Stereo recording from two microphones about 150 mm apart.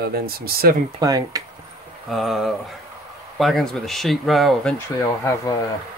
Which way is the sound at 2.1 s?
Centre (ahead or behind).